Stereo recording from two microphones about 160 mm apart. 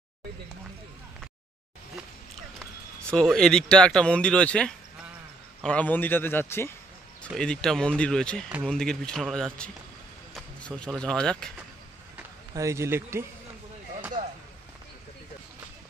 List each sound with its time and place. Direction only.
3.1 s a man's voice: 5° left (ahead or behind)
7.3 s speech: 5° left (ahead or behind)
12.2 s speech: 20° right (ahead or behind)